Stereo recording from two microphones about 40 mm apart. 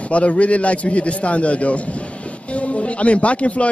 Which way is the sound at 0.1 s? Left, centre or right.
Left.